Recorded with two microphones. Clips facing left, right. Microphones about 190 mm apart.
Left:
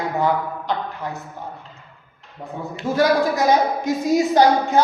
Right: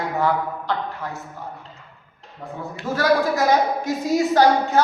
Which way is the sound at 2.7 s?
15° left (ahead or behind).